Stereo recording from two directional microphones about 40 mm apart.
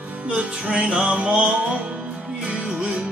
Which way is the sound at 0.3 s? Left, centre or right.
Right.